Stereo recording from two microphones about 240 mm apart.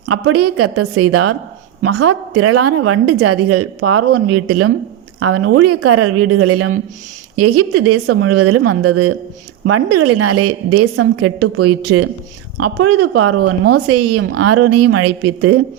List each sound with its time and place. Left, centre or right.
0.0 s a woman's voice: right